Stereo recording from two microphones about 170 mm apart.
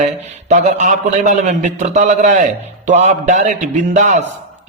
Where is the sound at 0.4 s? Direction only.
45° right (ahead or behind).